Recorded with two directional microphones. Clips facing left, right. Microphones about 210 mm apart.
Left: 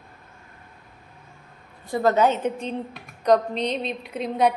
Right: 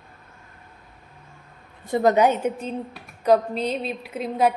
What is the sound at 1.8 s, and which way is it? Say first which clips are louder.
A woman's voice: right 2 dB; 20° right (ahead or behind).